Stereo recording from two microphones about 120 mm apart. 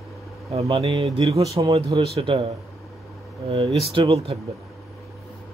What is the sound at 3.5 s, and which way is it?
Speech, 45° right (ahead or behind).